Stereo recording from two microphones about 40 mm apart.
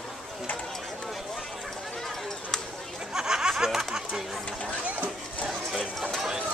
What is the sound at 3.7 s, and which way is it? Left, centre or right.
Music, centre.